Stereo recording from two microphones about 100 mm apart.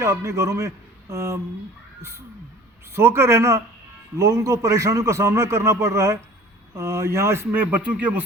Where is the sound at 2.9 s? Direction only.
25° right (ahead or behind).